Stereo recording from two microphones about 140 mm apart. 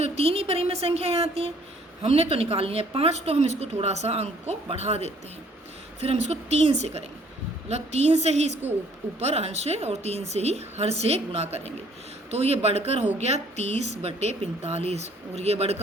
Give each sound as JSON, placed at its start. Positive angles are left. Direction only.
{"t": 0.0, "sound": "speech", "side_deg": -45}
{"t": 6.2, "sound": "speech", "side_deg": -50}